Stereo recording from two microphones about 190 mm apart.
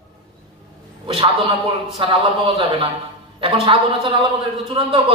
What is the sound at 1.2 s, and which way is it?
A man's voice, 30° right (ahead or behind).